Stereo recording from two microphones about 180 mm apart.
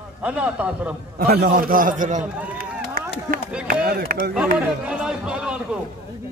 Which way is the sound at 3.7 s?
55° right (ahead or behind).